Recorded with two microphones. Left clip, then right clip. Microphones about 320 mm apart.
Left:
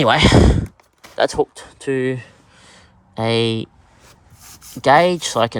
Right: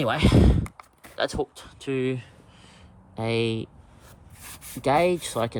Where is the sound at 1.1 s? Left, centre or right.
Left.